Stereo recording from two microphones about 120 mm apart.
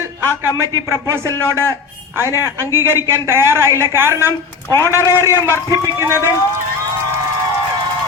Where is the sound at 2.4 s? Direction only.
20° right (ahead or behind).